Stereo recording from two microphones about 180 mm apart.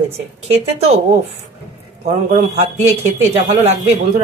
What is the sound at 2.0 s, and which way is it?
Speech, 35° right (ahead or behind).